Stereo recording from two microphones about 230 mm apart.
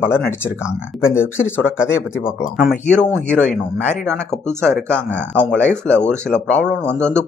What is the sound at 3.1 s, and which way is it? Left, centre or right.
Speech, centre.